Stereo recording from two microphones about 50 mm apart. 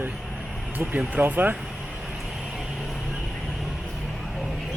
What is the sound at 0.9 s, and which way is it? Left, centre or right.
Speech, right.